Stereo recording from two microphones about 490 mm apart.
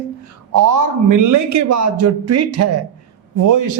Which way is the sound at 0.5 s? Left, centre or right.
Right.